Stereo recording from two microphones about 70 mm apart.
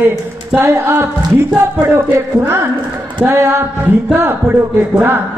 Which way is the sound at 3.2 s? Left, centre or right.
Right.